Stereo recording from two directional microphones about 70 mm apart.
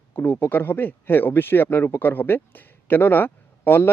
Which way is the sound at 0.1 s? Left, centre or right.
Left.